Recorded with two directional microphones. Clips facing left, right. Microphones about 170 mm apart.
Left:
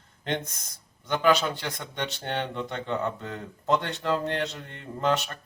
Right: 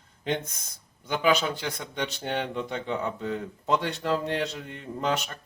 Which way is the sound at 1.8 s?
10° right (ahead or behind).